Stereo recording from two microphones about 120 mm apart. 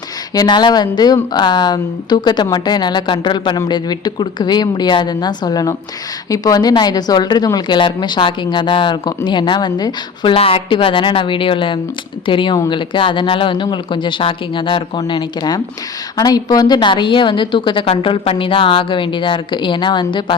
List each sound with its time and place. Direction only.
0.3 s speech: 35° left (ahead or behind)
10.3 s a woman's voice: 50° left (ahead or behind)